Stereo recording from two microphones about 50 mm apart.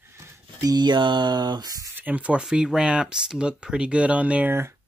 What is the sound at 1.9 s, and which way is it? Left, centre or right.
Speech, right.